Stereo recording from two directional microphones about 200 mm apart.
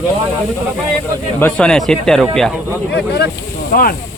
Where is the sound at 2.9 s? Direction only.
55° left (ahead or behind).